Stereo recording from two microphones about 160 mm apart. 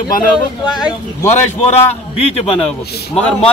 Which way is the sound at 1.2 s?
45° left (ahead or behind).